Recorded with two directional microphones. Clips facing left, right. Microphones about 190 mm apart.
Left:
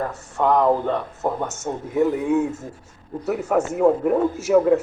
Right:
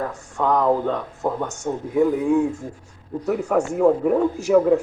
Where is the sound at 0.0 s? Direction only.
5° left (ahead or behind).